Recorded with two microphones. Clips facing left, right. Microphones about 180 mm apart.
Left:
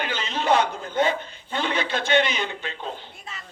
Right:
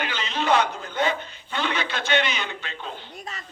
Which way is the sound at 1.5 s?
50° left (ahead or behind).